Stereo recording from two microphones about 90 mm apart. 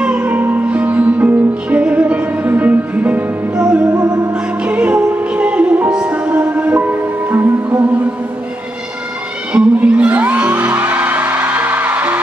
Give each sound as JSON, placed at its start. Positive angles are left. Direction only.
{"t": 0.2, "sound": "music", "side_deg": -20}
{"t": 9.5, "sound": "music", "side_deg": -15}